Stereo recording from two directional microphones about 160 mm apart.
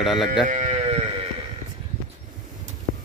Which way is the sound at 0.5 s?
45° right (ahead or behind).